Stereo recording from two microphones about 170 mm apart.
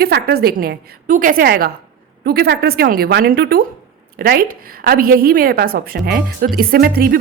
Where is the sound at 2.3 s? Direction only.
70° right (ahead or behind).